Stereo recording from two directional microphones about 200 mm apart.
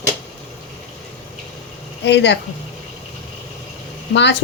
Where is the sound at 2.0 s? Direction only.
60° left (ahead or behind).